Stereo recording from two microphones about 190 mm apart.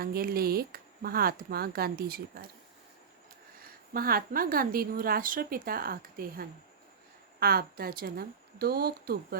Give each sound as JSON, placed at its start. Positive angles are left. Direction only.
{"t": 0.0, "sound": "a woman's voice", "side_deg": -55}
{"t": 3.6, "sound": "a woman's voice", "side_deg": -50}